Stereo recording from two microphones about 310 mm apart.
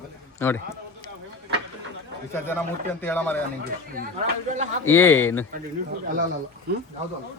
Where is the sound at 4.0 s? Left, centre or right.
Right.